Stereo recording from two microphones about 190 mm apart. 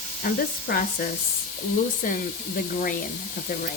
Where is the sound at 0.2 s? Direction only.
50° left (ahead or behind).